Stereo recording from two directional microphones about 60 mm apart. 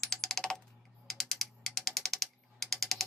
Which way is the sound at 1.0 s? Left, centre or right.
Centre.